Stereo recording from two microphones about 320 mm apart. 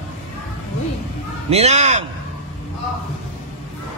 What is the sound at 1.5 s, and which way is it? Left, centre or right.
Speech, right.